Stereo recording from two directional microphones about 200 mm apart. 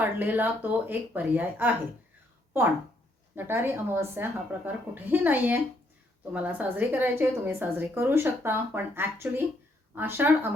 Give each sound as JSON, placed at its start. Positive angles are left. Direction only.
{"t": 0.0, "sound": "a woman's voice", "side_deg": -10}
{"t": 3.3, "sound": "a woman's voice", "side_deg": -10}